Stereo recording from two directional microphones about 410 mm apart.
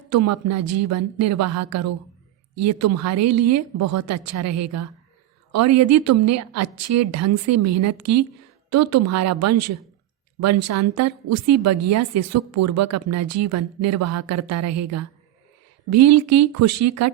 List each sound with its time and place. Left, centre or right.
0.1 s a woman's voice: right